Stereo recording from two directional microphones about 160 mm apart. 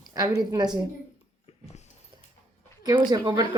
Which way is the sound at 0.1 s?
25° right (ahead or behind).